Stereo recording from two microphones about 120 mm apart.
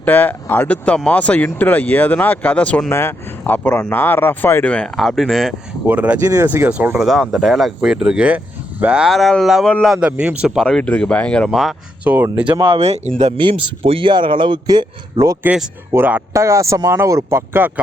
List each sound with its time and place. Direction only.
0.0 s speech: 15° left (ahead or behind)
4.7 s speech: 5° left (ahead or behind)
5.9 s speech: 10° right (ahead or behind)
6.2 s speech: 30° right (ahead or behind)
6.5 s speech: 10° right (ahead or behind)
7.0 s speech: centre (ahead or behind)
10.1 s speech: 10° right (ahead or behind)
12.0 s speech: 15° right (ahead or behind)
12.5 s speech: 40° right (ahead or behind)
12.8 s speech: 65° right (ahead or behind)
13.3 s speech: 50° right (ahead or behind)
15.4 s speech: 5° right (ahead or behind)
15.9 s speech: 15° right (ahead or behind)